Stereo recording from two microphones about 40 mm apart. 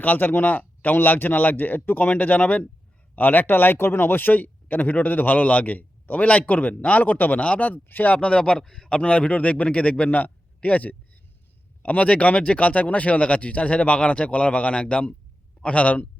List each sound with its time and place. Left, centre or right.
0.0 s speech: left
3.2 s speech: left
7.4 s speech: left
7.7 s speech: left
8.1 s speech: left
8.6 s speech: centre
9.0 s speech: left
10.1 s a man's voice: left